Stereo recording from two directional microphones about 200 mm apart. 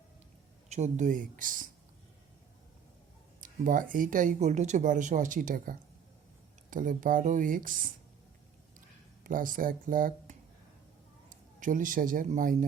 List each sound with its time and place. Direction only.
0.7 s speech: 35° right (ahead or behind)
3.4 s speech: 40° right (ahead or behind)
9.2 s speech: 45° right (ahead or behind)